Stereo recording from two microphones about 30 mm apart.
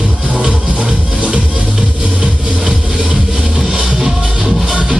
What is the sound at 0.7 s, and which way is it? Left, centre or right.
Music, right.